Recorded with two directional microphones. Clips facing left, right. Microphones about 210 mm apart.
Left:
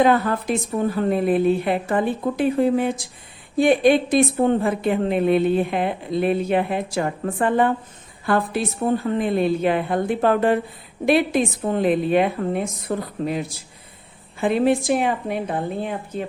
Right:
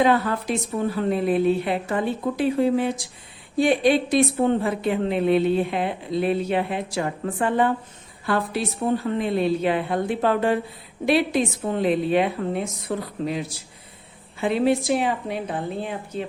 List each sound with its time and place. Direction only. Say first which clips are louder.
0.0 s a woman's voice: left 2 dB; 50° left (ahead or behind)
9.1 s a woman's voice: left 2 dB; 50° left (ahead or behind)
14.4 s a woman's voice: left 2 dB; 50° left (ahead or behind)